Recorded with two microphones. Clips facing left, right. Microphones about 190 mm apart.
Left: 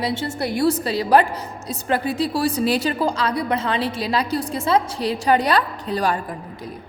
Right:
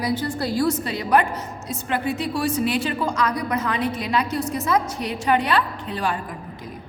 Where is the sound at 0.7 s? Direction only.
35° left (ahead or behind).